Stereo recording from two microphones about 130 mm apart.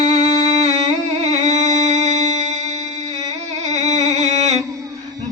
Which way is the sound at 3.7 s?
60° right (ahead or behind).